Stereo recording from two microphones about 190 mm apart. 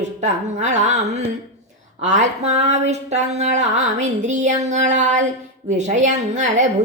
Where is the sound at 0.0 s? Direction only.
40° right (ahead or behind).